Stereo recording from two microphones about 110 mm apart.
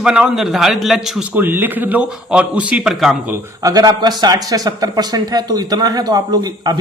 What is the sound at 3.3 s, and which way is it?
Speech, 30° right (ahead or behind).